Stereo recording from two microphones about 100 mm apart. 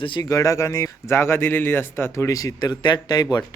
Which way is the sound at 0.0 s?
55° left (ahead or behind).